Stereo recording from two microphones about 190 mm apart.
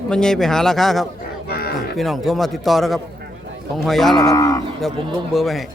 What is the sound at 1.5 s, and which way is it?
Livestock, 55° left (ahead or behind).